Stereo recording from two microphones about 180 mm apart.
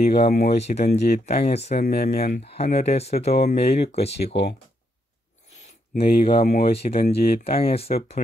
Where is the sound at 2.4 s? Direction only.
35° left (ahead or behind).